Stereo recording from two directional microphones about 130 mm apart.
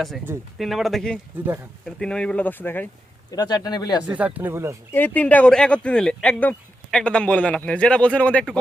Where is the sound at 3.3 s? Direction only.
30° left (ahead or behind).